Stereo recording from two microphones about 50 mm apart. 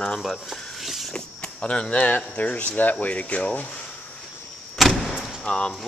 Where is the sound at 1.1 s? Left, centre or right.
Centre.